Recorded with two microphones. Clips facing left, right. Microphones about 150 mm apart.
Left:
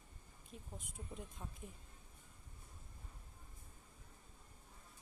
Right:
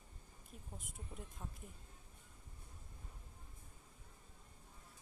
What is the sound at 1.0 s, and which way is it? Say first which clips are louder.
Speech: left 2 dB; 5° right (ahead or behind).